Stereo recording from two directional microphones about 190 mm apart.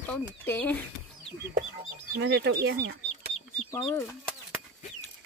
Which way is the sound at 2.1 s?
65° right (ahead or behind).